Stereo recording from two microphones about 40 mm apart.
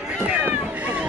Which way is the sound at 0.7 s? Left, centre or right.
Right.